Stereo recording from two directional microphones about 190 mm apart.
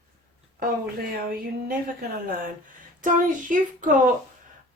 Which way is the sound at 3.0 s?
45° right (ahead or behind).